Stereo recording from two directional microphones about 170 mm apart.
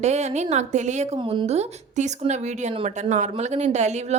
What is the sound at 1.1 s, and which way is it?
A woman's voice, 30° right (ahead or behind).